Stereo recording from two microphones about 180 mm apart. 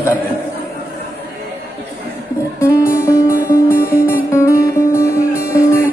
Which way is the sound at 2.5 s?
15° left (ahead or behind).